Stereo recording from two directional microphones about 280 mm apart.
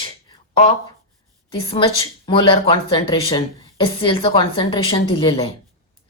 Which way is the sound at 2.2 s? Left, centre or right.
Centre.